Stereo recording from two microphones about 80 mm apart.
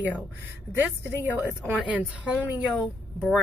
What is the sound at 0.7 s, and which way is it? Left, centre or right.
Speech, right.